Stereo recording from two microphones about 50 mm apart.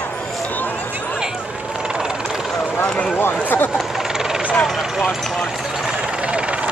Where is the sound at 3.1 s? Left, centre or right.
Left.